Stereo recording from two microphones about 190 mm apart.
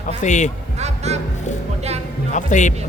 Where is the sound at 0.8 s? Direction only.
35° right (ahead or behind).